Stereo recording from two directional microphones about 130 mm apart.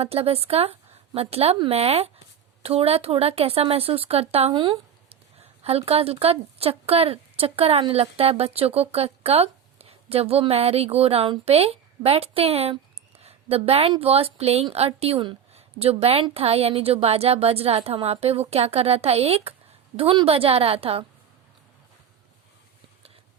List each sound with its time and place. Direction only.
0.0 s a woman's voice: 50° right (ahead or behind)
4.5 s speech: 40° right (ahead or behind)
5.4 s speech: 50° right (ahead or behind)